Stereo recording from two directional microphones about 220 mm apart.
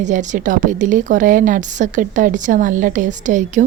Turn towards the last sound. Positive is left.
turn(degrees=-35)  # may be behind; listen again after turning